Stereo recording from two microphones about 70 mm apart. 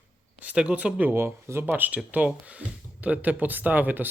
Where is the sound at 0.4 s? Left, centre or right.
Centre; by 1.6 s right.